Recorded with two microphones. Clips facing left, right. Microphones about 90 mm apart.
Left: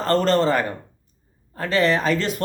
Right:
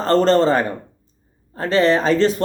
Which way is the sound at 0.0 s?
30° right (ahead or behind).